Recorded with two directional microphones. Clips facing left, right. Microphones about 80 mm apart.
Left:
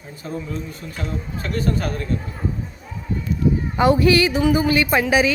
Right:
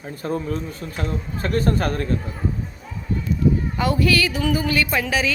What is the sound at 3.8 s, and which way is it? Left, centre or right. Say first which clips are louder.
A woman's voice: left 7 dB; left.